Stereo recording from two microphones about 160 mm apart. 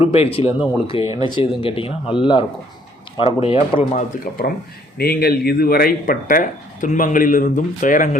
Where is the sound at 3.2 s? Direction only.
35° left (ahead or behind).